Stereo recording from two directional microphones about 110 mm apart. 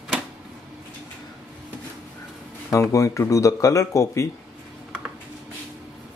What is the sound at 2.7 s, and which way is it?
Speech, 30° left (ahead or behind).